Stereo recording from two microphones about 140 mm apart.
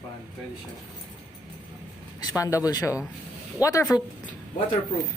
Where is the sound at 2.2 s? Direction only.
25° left (ahead or behind).